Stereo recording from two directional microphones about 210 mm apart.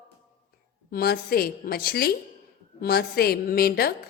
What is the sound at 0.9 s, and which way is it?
A woman's voice, 50° left (ahead or behind).